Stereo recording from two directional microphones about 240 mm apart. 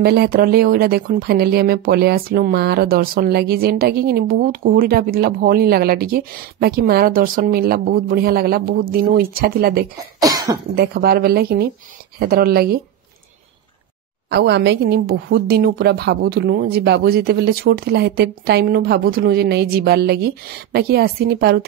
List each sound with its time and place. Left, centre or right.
0.0 s speech: right
10.2 s speech: centre
10.7 s speech: right
14.3 s speech: right